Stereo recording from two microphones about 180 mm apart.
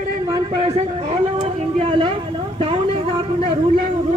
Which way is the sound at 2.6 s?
30° right (ahead or behind).